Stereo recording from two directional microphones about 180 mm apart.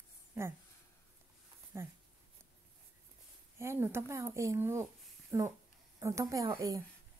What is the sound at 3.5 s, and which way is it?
Speech, 15° right (ahead or behind).